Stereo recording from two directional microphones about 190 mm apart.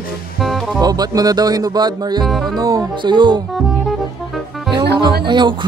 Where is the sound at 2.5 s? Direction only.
20° right (ahead or behind).